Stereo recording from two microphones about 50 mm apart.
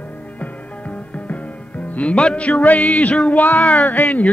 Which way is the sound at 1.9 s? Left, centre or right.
Left.